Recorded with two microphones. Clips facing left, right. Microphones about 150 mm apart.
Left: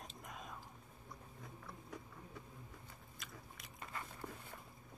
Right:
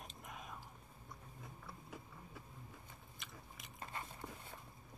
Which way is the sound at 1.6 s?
5° right (ahead or behind).